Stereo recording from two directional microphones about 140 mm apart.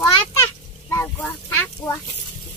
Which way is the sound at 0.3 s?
20° left (ahead or behind).